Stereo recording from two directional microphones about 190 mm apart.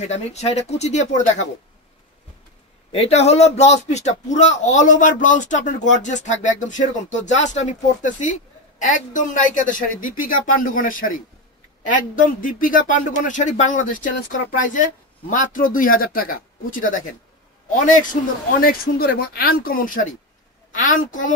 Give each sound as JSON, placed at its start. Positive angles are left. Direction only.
{"t": 0.0, "sound": "a man's voice", "side_deg": 35}
{"t": 2.9, "sound": "a man's voice", "side_deg": 35}